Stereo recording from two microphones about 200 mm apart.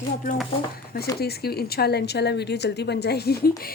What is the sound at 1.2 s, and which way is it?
Speech, 50° left (ahead or behind).